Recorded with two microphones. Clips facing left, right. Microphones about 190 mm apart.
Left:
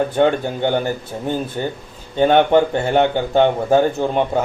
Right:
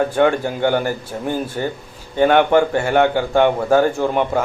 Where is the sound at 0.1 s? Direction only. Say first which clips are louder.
Even; 20° left (ahead or behind).